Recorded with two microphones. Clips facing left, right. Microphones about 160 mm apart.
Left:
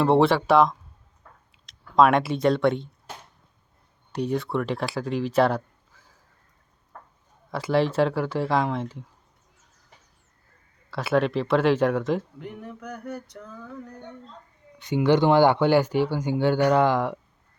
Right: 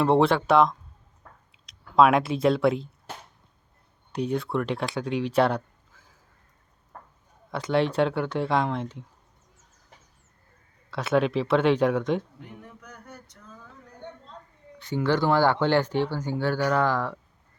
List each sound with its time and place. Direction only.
0.0 s speech: centre (ahead or behind)
4.1 s speech: centre (ahead or behind)
7.5 s speech: centre (ahead or behind)
10.9 s speech: centre (ahead or behind)
12.8 s a sound: 65° left (ahead or behind)
14.8 s speech: 15° left (ahead or behind)